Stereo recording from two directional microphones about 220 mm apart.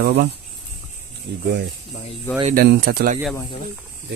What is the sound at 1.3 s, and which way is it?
Speech, 50° right (ahead or behind).